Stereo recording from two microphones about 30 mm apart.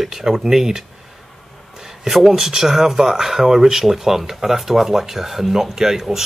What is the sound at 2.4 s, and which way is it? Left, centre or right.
Speech, centre.